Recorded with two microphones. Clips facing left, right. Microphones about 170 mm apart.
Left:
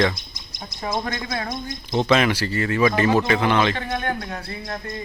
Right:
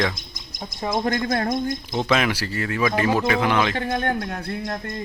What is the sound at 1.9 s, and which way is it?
Speech, 5° right (ahead or behind).